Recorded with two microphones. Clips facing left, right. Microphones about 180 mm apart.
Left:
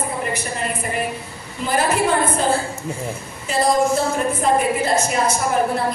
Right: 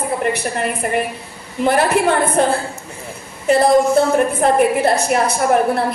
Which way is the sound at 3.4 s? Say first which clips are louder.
Right 6 dB; 60° right (ahead or behind).